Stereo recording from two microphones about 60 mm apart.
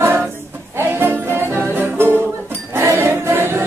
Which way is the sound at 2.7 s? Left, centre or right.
Right.